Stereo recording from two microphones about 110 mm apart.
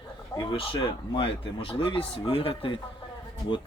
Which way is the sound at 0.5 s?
55° left (ahead or behind).